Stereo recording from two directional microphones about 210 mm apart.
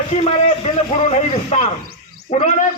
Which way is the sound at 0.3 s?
30° left (ahead or behind).